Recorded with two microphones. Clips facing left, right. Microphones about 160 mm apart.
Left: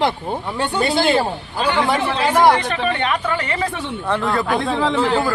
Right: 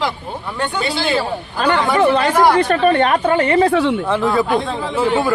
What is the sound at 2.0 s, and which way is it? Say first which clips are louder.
Speech: right 2 dB; 55° right (ahead or behind).